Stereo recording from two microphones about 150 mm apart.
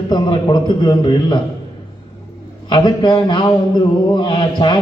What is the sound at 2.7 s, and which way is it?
A man's voice, 30° left (ahead or behind).